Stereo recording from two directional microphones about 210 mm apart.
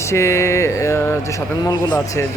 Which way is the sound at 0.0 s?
15° left (ahead or behind).